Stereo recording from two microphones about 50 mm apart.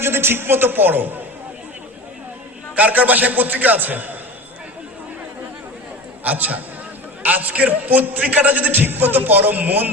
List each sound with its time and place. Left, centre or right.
0.0 s a man's voice: right
2.7 s a man's voice: right
6.2 s a man's voice: right